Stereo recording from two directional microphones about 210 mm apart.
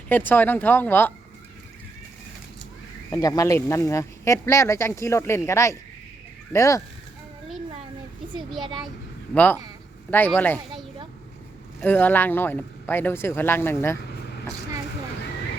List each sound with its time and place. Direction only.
0.1 s speech: 10° left (ahead or behind)
3.1 s speech: 15° left (ahead or behind)
8.6 s a child's voice: 20° right (ahead or behind)
9.3 s speech: 5° left (ahead or behind)
11.8 s speech: 10° left (ahead or behind)